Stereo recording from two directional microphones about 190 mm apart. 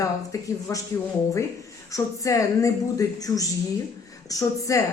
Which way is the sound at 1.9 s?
15° left (ahead or behind).